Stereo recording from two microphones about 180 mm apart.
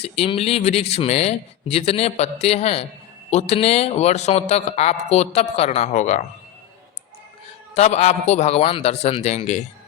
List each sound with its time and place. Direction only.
0.0 s speech: 35° left (ahead or behind)
7.8 s speech: 35° left (ahead or behind)